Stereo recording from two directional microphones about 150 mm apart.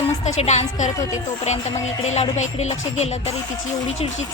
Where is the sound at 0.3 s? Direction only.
50° left (ahead or behind).